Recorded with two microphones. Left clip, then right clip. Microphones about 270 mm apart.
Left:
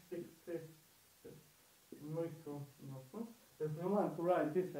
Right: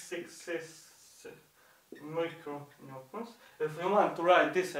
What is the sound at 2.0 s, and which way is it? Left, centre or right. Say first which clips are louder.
Speech: right 8 dB; centre.